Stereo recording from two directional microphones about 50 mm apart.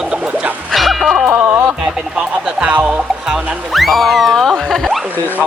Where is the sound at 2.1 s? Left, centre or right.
Centre.